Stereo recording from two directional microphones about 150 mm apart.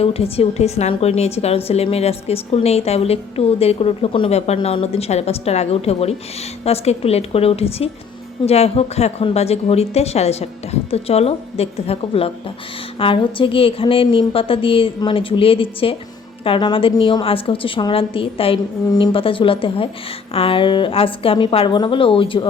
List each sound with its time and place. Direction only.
0.0 s a woman's voice: 40° left (ahead or behind)